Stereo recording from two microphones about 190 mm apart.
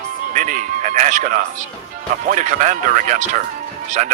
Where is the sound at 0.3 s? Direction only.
45° right (ahead or behind).